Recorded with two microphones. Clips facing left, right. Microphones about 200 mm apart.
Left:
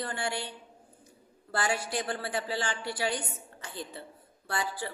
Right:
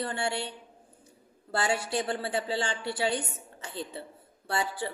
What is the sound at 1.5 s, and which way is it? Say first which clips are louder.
A woman's voice: right 2 dB; 25° right (ahead or behind).